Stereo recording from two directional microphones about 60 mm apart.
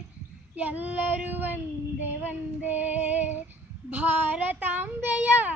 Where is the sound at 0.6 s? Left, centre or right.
Right.